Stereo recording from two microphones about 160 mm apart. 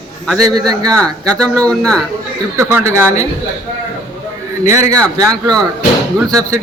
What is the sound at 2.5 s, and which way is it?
Speech, 20° right (ahead or behind).